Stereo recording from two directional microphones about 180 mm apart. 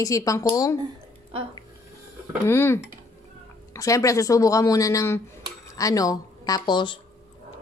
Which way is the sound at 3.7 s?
20° left (ahead or behind).